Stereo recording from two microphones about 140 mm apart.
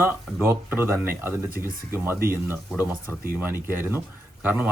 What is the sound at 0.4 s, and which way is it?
Speech, 15° right (ahead or behind).